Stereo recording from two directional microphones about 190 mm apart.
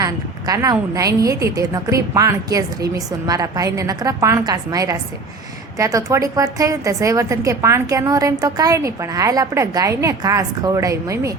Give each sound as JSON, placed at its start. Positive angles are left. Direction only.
{"t": 0.0, "sound": "a woman's voice", "side_deg": -20}